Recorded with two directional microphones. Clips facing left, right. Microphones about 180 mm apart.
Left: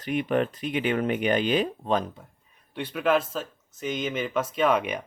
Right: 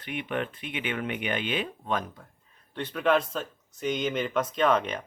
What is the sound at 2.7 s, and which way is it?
Speech, 10° left (ahead or behind).